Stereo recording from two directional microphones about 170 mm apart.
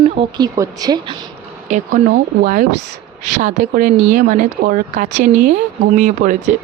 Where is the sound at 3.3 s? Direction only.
45° right (ahead or behind).